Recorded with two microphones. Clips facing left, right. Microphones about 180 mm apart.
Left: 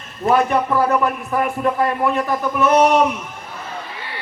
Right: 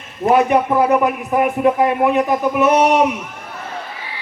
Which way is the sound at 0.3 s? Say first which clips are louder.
Right 3 dB; 15° right (ahead or behind).